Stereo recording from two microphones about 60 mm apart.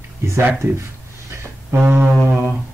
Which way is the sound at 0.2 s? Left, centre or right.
Right.